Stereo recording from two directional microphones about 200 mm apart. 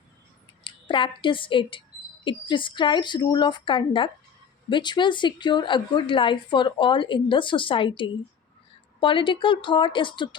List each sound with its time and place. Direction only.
0.6 s a woman's voice: 25° left (ahead or behind)